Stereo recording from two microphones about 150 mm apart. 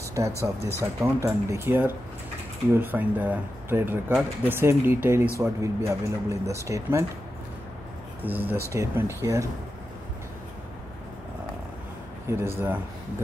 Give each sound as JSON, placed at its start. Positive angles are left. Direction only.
{"t": 0.2, "sound": "speech", "side_deg": -20}
{"t": 8.2, "sound": "speech", "side_deg": -10}
{"t": 12.3, "sound": "speech", "side_deg": -15}